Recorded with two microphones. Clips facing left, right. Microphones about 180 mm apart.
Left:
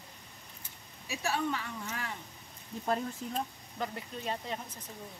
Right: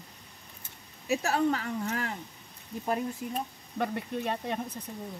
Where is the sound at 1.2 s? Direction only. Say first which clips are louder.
Right 4 dB; 45° right (ahead or behind).